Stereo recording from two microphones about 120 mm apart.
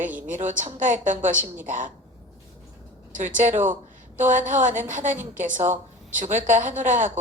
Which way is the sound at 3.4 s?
90° right.